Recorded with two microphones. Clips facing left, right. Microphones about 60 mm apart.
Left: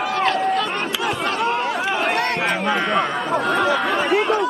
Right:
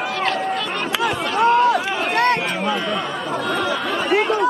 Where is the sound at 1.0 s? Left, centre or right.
Right.